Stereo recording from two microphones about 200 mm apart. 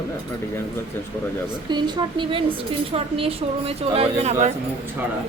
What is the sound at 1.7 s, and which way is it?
Speech, 25° right (ahead or behind).